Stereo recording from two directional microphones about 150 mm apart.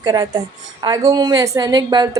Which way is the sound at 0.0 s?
30° right (ahead or behind).